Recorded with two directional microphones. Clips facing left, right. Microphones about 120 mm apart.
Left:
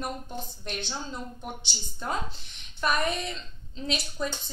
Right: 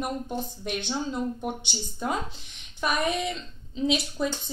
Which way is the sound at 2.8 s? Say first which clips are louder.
Right 1 dB; 10° right (ahead or behind).